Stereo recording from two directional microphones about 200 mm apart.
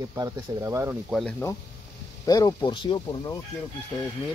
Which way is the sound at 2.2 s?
20° left (ahead or behind).